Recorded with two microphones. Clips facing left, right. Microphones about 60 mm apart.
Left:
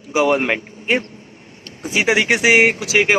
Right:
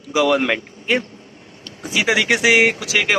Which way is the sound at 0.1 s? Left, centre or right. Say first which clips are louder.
Even; left.